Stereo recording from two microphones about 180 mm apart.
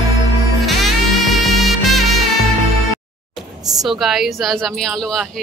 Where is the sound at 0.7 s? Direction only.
Centre (ahead or behind).